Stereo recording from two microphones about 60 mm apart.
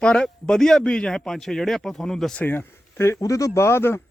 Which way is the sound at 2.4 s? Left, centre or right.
Left.